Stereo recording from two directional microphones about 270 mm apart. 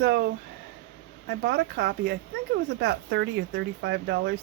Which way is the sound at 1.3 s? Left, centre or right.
Right.